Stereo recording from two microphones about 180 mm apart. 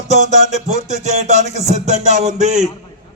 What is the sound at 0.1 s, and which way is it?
Music, 40° right (ahead or behind).